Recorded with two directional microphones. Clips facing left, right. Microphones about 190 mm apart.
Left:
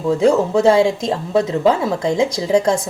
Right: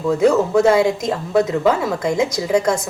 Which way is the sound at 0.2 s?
30° left (ahead or behind).